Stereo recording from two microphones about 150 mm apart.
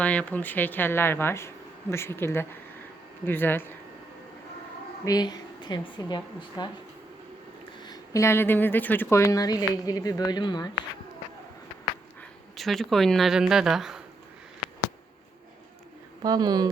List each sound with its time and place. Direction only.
0.0 s speech: 10° left (ahead or behind)
5.0 s a woman's voice: 25° left (ahead or behind)
7.8 s a woman's voice: 25° left (ahead or behind)
12.5 s speech: centre (ahead or behind)
16.2 s speech: 25° right (ahead or behind)